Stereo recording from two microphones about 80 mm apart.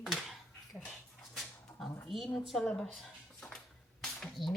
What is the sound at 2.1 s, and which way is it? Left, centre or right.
Speech, centre.